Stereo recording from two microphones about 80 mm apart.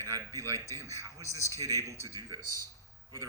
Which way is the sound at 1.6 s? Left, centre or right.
Right.